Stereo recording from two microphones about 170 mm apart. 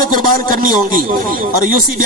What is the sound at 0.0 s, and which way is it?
A man's voice, 55° right (ahead or behind).